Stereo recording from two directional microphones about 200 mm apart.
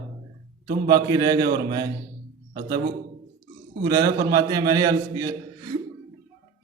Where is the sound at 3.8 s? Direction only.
20° right (ahead or behind).